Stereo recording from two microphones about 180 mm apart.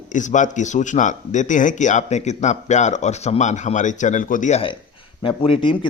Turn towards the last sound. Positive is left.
turn(degrees=30)  # may be behind; listen again after turning